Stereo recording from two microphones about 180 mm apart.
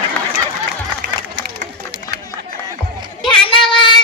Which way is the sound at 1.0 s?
65° right (ahead or behind).